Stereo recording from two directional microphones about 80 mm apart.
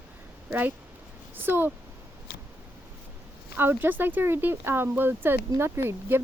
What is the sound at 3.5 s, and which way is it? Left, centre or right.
Speech, right.